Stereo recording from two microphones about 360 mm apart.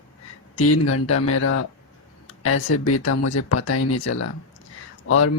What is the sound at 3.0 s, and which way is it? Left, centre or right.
Speech, left.